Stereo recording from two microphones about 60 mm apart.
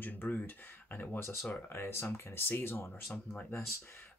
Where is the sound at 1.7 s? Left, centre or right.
Left.